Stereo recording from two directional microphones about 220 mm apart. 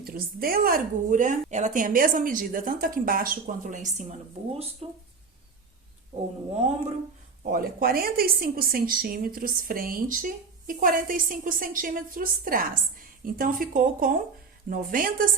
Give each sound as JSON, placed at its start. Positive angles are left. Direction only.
{"t": 0.0, "sound": "a woman's voice", "side_deg": -40}
{"t": 6.1, "sound": "speech", "side_deg": -30}
{"t": 7.4, "sound": "a woman's voice", "side_deg": -40}